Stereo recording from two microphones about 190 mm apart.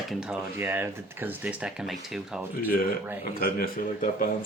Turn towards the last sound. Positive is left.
turn(degrees=45)  # may be behind; listen again after turning